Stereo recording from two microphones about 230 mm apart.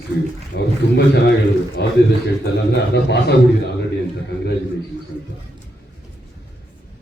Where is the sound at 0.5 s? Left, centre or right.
Left.